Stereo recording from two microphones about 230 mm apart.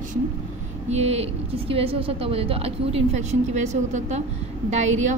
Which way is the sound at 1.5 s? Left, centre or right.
Right.